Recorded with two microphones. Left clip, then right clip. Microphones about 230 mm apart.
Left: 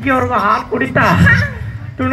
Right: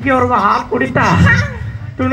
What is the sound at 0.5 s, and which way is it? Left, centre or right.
Speech, right.